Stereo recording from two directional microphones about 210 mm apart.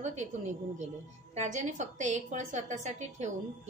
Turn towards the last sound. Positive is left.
turn(degrees=-35)  # may be behind; listen again after turning